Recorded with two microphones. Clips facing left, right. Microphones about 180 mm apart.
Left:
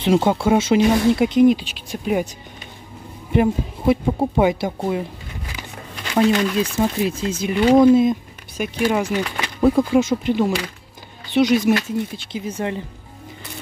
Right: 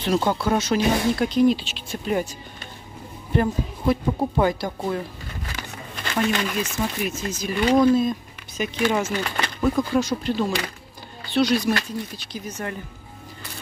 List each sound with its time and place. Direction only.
0.0 s speech: 25° left (ahead or behind)
3.3 s speech: 20° left (ahead or behind)
5.5 s a sound: 15° left (ahead or behind)
6.6 s speech: 30° left (ahead or behind)
8.5 s speech: 10° left (ahead or behind)
9.6 s speech: 25° left (ahead or behind)